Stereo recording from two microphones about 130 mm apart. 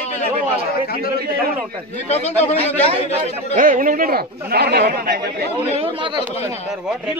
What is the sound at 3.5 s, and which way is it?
Speech, 90° right.